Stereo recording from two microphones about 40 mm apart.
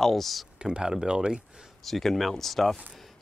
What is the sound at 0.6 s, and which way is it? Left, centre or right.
Speech, right.